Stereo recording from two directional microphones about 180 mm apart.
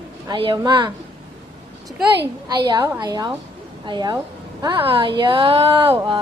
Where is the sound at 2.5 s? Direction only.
25° right (ahead or behind).